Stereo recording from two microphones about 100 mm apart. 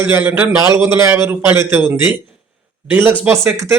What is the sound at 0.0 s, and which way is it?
Speech, 20° right (ahead or behind).